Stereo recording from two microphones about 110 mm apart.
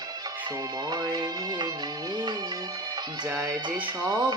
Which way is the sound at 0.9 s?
35° right (ahead or behind).